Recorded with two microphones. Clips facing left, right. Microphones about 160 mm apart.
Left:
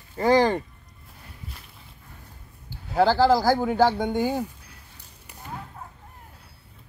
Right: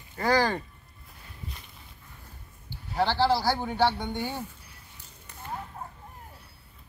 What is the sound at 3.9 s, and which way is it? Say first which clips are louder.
Speech: left 8 dB; 90° left.